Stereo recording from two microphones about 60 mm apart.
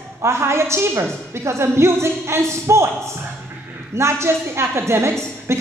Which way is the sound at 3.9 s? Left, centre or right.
Right.